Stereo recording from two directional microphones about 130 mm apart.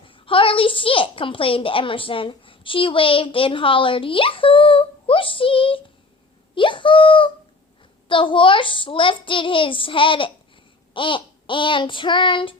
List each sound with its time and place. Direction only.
0.1 s a woman's voice: 40° left (ahead or behind)